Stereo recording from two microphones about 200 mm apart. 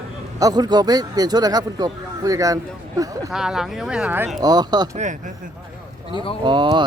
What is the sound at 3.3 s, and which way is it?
Speech, 5° right (ahead or behind).